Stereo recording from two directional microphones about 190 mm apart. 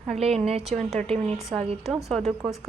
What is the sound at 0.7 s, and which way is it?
A woman's voice, centre (ahead or behind).